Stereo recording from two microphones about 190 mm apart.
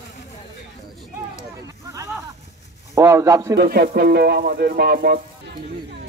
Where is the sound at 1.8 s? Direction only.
15° right (ahead or behind).